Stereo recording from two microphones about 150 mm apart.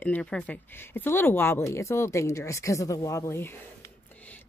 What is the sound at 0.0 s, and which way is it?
Speech, 10° left (ahead or behind).